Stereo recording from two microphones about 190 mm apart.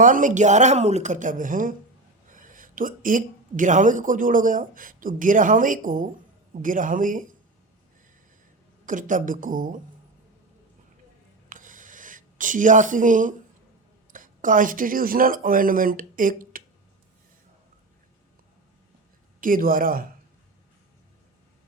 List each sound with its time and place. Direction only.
0.0 s a woman's voice: 45° right (ahead or behind)
8.9 s a woman's voice: 45° right (ahead or behind)
11.4 s a sound: 45° right (ahead or behind)
14.1 s speech: 45° right (ahead or behind)
19.4 s a woman's voice: 45° right (ahead or behind)